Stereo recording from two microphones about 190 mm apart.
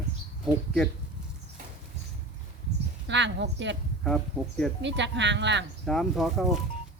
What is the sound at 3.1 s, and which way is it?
Speech, 70° right (ahead or behind).